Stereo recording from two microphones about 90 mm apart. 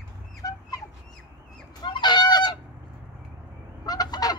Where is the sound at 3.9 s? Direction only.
45° left (ahead or behind).